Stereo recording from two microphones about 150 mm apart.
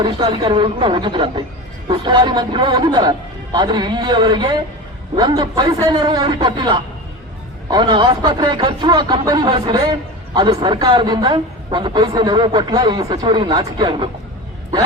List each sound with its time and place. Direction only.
0.0 s a man's voice: 30° right (ahead or behind)